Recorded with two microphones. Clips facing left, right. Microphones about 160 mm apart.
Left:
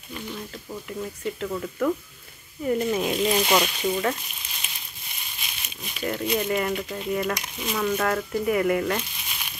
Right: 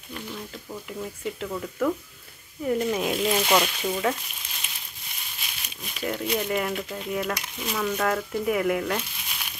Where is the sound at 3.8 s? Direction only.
5° right (ahead or behind).